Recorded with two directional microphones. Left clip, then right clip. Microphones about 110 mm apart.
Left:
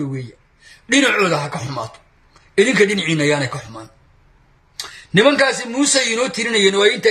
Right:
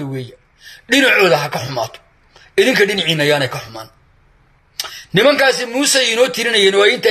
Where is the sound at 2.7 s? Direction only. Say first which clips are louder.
Right 2 dB; 15° right (ahead or behind).